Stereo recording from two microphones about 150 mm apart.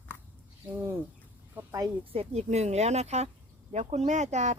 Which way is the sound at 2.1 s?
45° right (ahead or behind).